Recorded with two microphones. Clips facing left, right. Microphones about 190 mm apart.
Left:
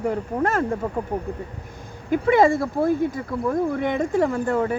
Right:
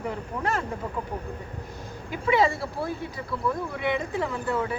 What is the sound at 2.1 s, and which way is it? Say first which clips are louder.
Speech: left 6 dB; 50° left (ahead or behind).